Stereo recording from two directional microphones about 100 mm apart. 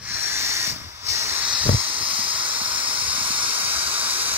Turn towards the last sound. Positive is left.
turn(degrees=-15)  # may be behind; listen again after turning